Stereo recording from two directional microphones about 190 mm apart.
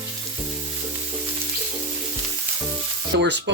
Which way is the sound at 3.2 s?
65° right (ahead or behind).